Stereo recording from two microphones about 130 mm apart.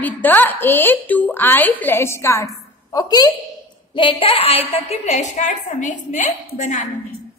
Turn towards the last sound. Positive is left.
turn(degrees=65)  # may be behind; listen again after turning